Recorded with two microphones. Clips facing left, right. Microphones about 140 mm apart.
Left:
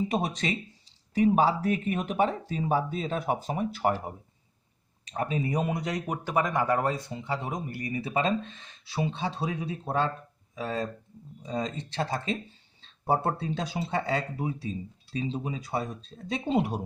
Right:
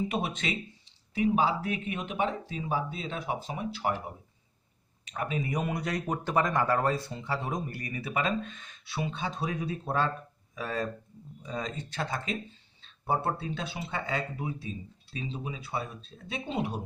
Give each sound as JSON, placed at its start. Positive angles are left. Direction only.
{"t": 0.1, "sound": "speech", "side_deg": 40}
{"t": 5.0, "sound": "speech", "side_deg": 35}
{"t": 12.8, "sound": "a sound", "side_deg": 40}
{"t": 13.4, "sound": "speech", "side_deg": 35}